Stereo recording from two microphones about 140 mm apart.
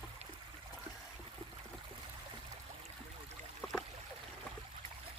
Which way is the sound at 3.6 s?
5° left (ahead or behind).